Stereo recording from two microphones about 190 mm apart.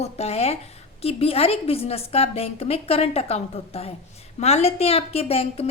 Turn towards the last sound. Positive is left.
turn(degrees=30)  # may be behind; listen again after turning